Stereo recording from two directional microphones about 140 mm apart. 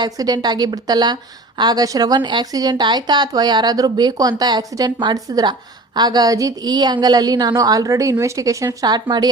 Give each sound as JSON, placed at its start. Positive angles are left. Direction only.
{"t": 0.0, "sound": "a woman's voice", "side_deg": -30}